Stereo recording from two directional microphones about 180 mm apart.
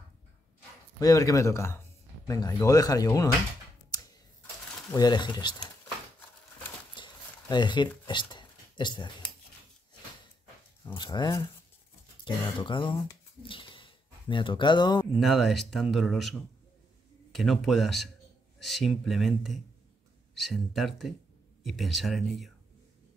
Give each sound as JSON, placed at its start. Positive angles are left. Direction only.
{"t": 0.9, "sound": "speech", "side_deg": 20}
{"t": 4.9, "sound": "speech", "side_deg": 25}
{"t": 7.0, "sound": "a sound", "side_deg": 25}
{"t": 8.1, "sound": "speech", "side_deg": 25}
{"t": 11.0, "sound": "speech", "side_deg": 25}
{"t": 12.5, "sound": "speech", "side_deg": 25}
{"t": 13.4, "sound": "a sound", "side_deg": 30}
{"t": 15.1, "sound": "speech", "side_deg": 0}